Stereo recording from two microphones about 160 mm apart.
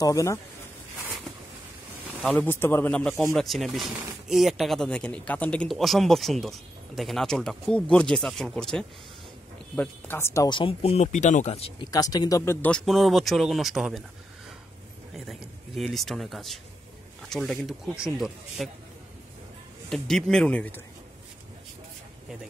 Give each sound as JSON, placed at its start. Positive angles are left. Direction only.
{"t": 0.0, "sound": "speech", "side_deg": 20}
{"t": 2.2, "sound": "a man's voice", "side_deg": 10}
{"t": 11.1, "sound": "speech", "side_deg": 50}
{"t": 11.9, "sound": "speech", "side_deg": 25}
{"t": 12.6, "sound": "speech", "side_deg": 5}
{"t": 15.1, "sound": "speech", "side_deg": 0}
{"t": 19.9, "sound": "speech", "side_deg": 5}